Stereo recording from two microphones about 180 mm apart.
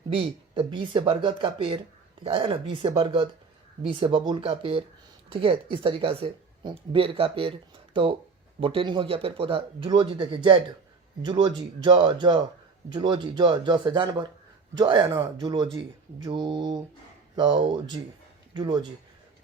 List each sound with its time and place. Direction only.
0.1 s speech: 30° right (ahead or behind)